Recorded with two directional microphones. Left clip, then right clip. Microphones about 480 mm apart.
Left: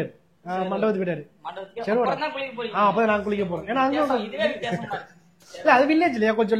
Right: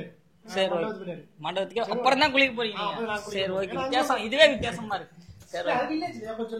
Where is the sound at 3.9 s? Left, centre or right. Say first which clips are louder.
Left 2 dB; right.